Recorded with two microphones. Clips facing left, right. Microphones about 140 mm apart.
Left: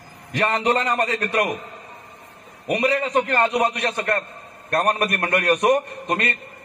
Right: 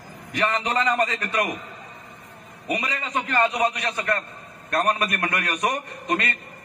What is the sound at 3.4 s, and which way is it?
A man's voice, 30° left (ahead or behind).